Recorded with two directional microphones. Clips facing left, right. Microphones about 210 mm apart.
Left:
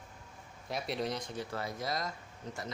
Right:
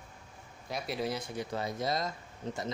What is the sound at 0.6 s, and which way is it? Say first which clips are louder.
Speech: right 1 dB; centre (ahead or behind).